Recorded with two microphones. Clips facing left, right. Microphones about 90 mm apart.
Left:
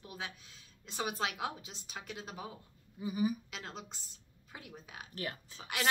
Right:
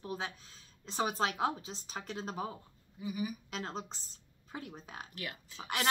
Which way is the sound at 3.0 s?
35° left (ahead or behind).